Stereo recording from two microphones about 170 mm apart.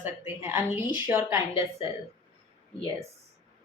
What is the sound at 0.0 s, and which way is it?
A woman's voice, 10° right (ahead or behind).